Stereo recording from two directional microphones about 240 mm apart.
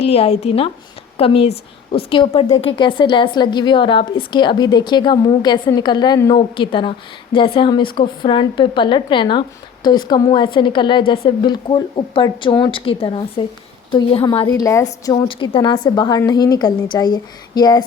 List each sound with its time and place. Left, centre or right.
0.0 s a woman's voice: left